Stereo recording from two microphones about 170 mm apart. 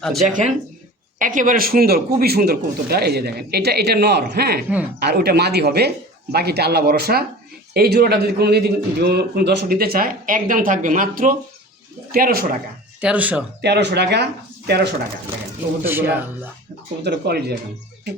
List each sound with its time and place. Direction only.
0.0 s speech: centre (ahead or behind)
1.2 s a man's voice: 50° right (ahead or behind)
13.0 s speech: 5° right (ahead or behind)
13.6 s speech: 80° right
15.8 s speech: 10° right (ahead or behind)
17.0 s speech: 75° right (ahead or behind)